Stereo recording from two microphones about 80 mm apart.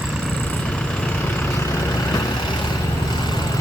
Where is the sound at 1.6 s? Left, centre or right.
Left.